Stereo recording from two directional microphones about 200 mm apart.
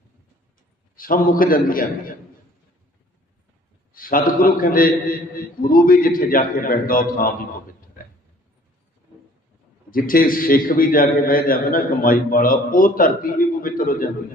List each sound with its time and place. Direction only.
0.9 s a man's voice: 45° left (ahead or behind)
3.9 s a man's voice: 45° left (ahead or behind)
9.9 s a man's voice: 45° left (ahead or behind)